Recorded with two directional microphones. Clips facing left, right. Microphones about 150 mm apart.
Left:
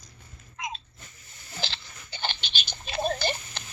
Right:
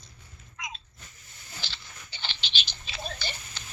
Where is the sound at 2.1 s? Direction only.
50° left (ahead or behind).